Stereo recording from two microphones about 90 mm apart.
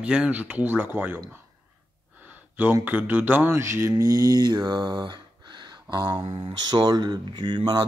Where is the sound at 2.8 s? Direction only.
20° right (ahead or behind).